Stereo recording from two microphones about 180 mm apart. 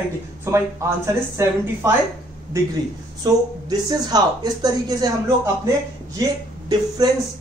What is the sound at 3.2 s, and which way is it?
Speech, 20° right (ahead or behind).